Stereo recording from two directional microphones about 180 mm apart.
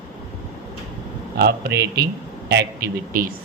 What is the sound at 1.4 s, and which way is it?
Speech, 65° right (ahead or behind).